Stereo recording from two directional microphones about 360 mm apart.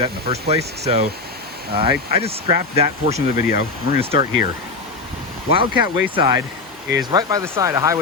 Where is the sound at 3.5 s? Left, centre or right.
Left.